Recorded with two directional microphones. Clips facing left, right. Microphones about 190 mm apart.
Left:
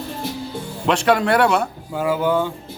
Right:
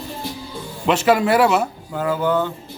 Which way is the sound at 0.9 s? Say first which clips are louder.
Right 1 dB; 5° right (ahead or behind).